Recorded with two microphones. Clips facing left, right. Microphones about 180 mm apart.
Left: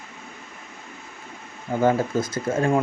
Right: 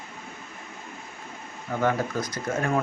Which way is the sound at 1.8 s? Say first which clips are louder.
Left 5 dB; 25° left (ahead or behind).